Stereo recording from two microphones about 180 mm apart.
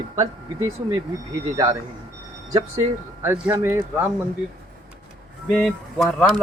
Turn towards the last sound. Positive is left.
turn(degrees=0)  # may be behind; listen again after turning